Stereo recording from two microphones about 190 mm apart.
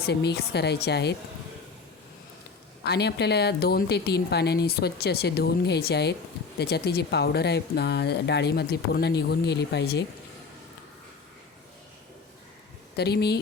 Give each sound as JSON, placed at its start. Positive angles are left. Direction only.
{"t": 0.0, "sound": "speech", "side_deg": 60}
{"t": 2.8, "sound": "speech", "side_deg": 60}
{"t": 13.0, "sound": "speech", "side_deg": 60}